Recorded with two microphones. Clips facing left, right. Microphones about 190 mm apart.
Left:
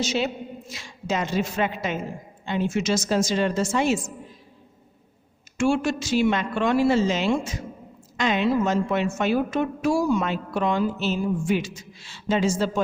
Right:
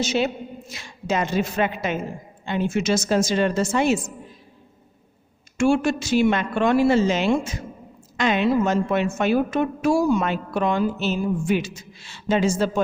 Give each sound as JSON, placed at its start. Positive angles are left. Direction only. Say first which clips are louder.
{"t": 0.0, "sound": "a woman's voice", "louder": "right 3 dB", "side_deg": -55}
{"t": 5.5, "sound": "a woman's voice", "louder": "right 3 dB", "side_deg": -55}